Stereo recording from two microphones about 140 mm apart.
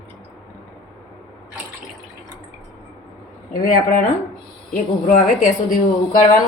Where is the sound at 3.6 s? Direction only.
70° left (ahead or behind).